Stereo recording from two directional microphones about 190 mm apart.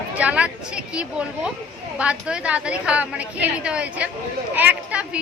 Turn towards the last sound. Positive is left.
turn(degrees=-5)  # may be behind; listen again after turning